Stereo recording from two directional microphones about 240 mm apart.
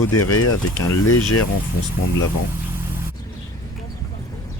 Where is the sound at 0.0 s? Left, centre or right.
Left.